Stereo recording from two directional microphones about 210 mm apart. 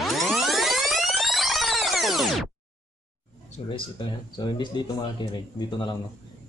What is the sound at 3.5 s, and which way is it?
Speech, 20° left (ahead or behind).